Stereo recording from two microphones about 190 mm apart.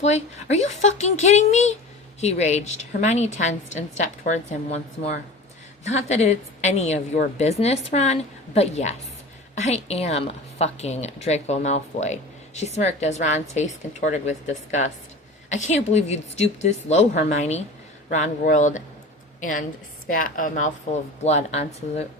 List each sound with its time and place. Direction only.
0.0 s a woman's voice: 35° left (ahead or behind)